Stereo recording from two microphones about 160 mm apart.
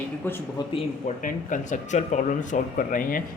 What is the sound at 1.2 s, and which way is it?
Speech, 55° left (ahead or behind).